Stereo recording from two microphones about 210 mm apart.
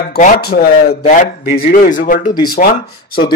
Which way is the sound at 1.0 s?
35° left (ahead or behind).